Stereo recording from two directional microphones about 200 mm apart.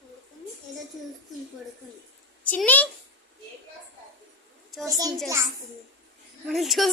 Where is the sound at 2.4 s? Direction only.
10° left (ahead or behind).